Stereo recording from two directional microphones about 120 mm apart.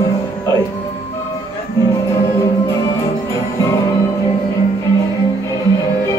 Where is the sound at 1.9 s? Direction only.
25° left (ahead or behind).